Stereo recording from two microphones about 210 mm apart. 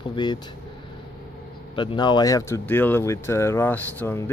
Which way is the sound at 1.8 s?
20° left (ahead or behind).